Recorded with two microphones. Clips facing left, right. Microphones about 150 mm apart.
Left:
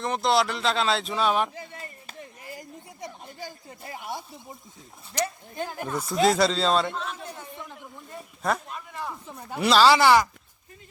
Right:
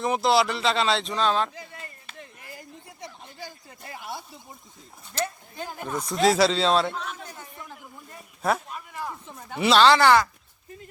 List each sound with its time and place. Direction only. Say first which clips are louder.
0.0 s speech: right 2 dB; 5° right (ahead or behind); by 1.5 s 10° left (ahead or behind)
1.7 s chop: left 2 dB; 30° left (ahead or behind)
3.0 s a sound: left 2 dB; 20° left (ahead or behind)
5.2 s speech: left 1 dB; 15° left (ahead or behind)
6.1 s a sound: right 1 dB; centre (ahead or behind)
9.3 s speech: right 1 dB; centre (ahead or behind)